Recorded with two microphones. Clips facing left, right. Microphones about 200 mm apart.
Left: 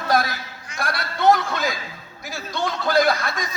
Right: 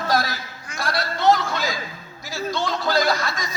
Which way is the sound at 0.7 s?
55° left (ahead or behind).